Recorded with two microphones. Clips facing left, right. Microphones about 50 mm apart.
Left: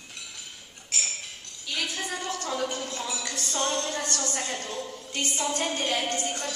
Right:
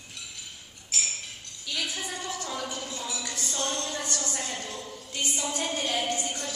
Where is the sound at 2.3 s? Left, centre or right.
Left.